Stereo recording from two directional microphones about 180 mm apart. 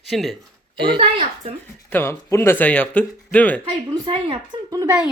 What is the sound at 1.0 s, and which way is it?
Speech, 30° right (ahead or behind).